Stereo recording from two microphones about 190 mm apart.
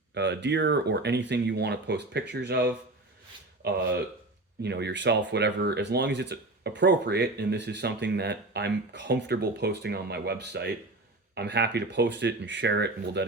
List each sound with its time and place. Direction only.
0.1 s speech: 65° right (ahead or behind)
4.6 s speech: 65° right (ahead or behind)